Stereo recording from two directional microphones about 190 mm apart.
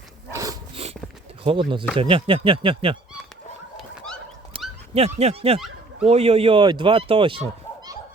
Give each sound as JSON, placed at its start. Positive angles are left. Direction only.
{"t": 0.3, "sound": "dog", "side_deg": -15}
{"t": 0.7, "sound": "dog", "side_deg": -35}
{"t": 1.5, "sound": "speech", "side_deg": -25}
{"t": 3.8, "sound": "dog", "side_deg": 0}
{"t": 4.5, "sound": "dog", "side_deg": -30}
{"t": 4.9, "sound": "speech", "side_deg": -35}